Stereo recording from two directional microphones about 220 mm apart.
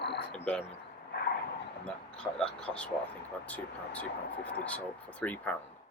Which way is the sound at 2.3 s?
5° left (ahead or behind).